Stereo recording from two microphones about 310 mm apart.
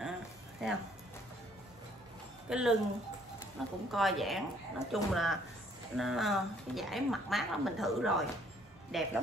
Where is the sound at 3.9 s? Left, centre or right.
Centre.